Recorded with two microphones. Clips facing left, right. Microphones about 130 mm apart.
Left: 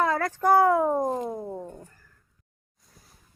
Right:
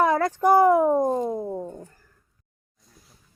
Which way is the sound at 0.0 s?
20° right (ahead or behind).